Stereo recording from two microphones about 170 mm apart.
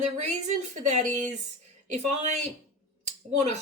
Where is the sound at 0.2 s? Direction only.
45° right (ahead or behind).